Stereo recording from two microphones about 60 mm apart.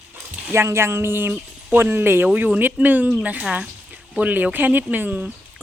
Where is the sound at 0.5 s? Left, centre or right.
Right.